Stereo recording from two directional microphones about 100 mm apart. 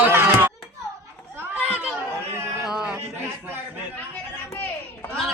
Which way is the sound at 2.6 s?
5° right (ahead or behind).